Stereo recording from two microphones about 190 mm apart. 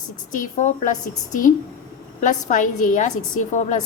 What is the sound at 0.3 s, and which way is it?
A woman's voice, 45° left (ahead or behind).